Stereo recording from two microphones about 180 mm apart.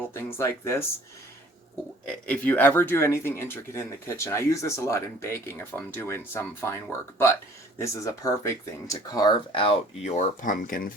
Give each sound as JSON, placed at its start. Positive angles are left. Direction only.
{"t": 0.1, "sound": "speech", "side_deg": 15}
{"t": 2.0, "sound": "speech", "side_deg": 5}
{"t": 7.8, "sound": "speech", "side_deg": 20}